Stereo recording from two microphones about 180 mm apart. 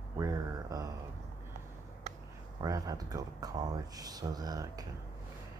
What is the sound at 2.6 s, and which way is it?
Speech, 20° right (ahead or behind).